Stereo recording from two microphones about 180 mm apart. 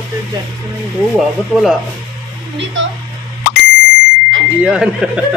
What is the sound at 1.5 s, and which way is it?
Speech, centre (ahead or behind).